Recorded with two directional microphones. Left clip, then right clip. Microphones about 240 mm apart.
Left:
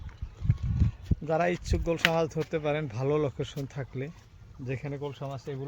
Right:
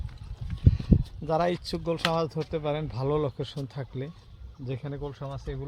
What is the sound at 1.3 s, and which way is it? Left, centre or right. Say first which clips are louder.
Speech: right 1 dB; centre.